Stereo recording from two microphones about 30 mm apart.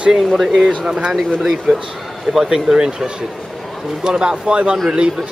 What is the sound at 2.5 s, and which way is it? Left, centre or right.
Speech, right.